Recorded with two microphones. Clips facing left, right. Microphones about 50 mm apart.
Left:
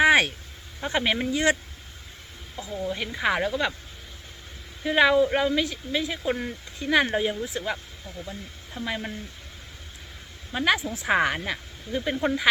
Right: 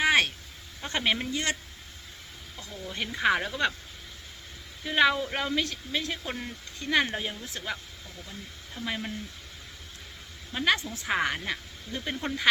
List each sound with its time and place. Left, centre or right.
0.0 s a sound: centre
0.8 s speech: centre
2.6 s speech: left
2.9 s speech: centre
4.8 s speech: centre
8.2 s speech: left
8.8 s speech: centre
10.5 s speech: centre